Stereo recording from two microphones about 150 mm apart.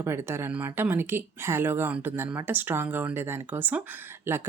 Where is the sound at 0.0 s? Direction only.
15° right (ahead or behind).